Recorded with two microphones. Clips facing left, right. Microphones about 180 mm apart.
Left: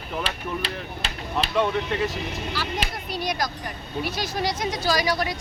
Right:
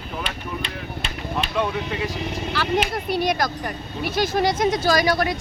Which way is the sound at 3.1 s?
55° right (ahead or behind).